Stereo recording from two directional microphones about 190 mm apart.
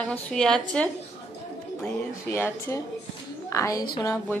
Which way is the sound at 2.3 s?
15° left (ahead or behind).